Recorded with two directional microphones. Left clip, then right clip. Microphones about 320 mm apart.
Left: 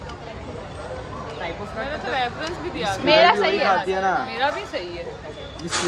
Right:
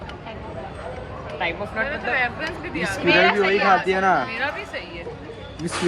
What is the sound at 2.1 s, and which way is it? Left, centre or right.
Speech, centre.